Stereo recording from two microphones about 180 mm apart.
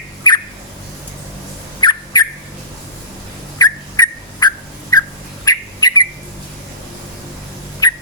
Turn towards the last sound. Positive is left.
turn(degrees=20)  # may be behind; listen again after turning